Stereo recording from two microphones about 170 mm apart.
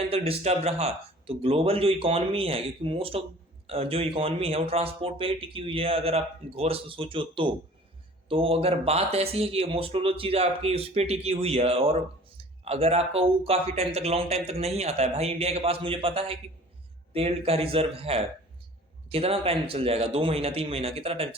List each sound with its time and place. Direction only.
0.1 s speech: 35° right (ahead or behind)